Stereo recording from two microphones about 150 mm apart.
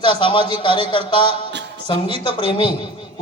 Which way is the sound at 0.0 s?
35° left (ahead or behind).